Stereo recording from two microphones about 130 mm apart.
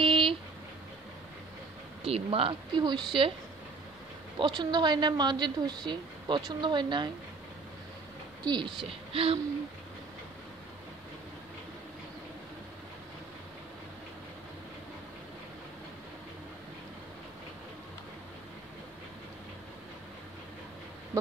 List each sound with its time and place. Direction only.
0.0 s a sound: 40° right (ahead or behind)
2.0 s speech: 50° right (ahead or behind)
4.4 s a woman's voice: 35° right (ahead or behind)
8.5 s a woman's voice: 35° right (ahead or behind)